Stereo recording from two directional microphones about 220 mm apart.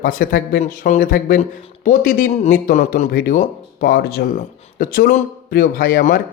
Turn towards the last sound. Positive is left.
turn(degrees=45)  # may be behind; listen again after turning